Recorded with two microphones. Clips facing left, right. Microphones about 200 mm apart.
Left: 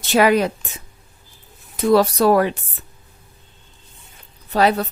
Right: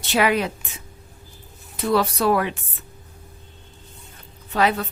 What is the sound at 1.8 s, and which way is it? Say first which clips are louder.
Speech: left 5 dB; 40° left (ahead or behind).